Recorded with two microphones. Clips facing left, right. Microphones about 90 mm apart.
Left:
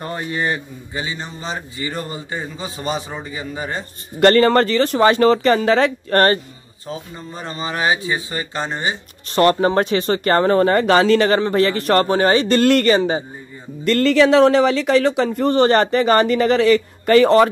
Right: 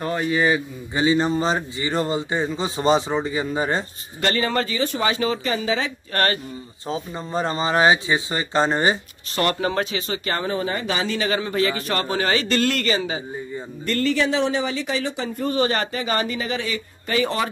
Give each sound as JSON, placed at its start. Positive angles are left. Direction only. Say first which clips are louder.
{"t": 0.0, "sound": "a man's voice", "louder": "right 3 dB", "side_deg": 0}
{"t": 0.9, "sound": "speech", "louder": "right 9 dB", "side_deg": -30}
{"t": 1.8, "sound": "a man's voice", "louder": "right 4 dB", "side_deg": -25}
{"t": 4.2, "sound": "speech", "louder": "left 10 dB", "side_deg": 55}
{"t": 6.1, "sound": "speech", "louder": "left 7 dB", "side_deg": 40}
{"t": 6.9, "sound": "speech", "louder": "right 3 dB", "side_deg": -35}
{"t": 9.3, "sound": "speech", "louder": "left 7 dB", "side_deg": 35}
{"t": 12.1, "sound": "speech", "louder": "left 7 dB", "side_deg": 35}
{"t": 12.6, "sound": "speech", "louder": "left 8 dB", "side_deg": 50}
{"t": 13.8, "sound": "speech", "louder": "left 8 dB", "side_deg": 80}